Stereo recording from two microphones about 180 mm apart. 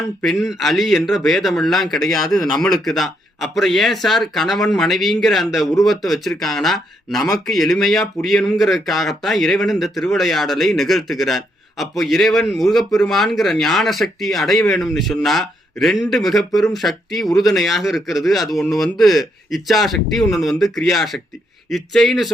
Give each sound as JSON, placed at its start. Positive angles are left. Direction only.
{"t": 0.2, "sound": "speech", "side_deg": 0}
{"t": 2.3, "sound": "a man's voice", "side_deg": 20}
{"t": 2.6, "sound": "speech", "side_deg": 0}